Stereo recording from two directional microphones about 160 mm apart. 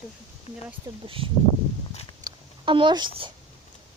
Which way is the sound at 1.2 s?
35° right (ahead or behind).